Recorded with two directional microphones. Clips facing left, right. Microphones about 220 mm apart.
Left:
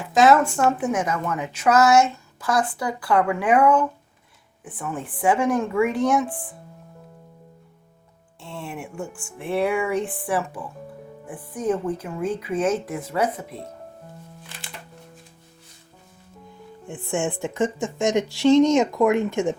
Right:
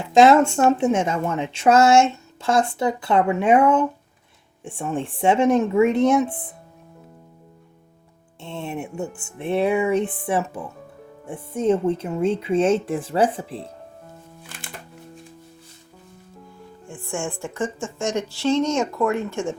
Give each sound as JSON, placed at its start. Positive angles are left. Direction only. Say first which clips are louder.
{"t": 0.0, "sound": "speech", "louder": "right 3 dB", "side_deg": -25}
{"t": 8.4, "sound": "speech", "louder": "right 4 dB", "side_deg": -25}
{"t": 16.8, "sound": "speech", "louder": "left 3 dB", "side_deg": 20}